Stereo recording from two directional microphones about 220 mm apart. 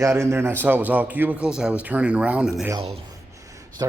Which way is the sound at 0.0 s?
10° right (ahead or behind).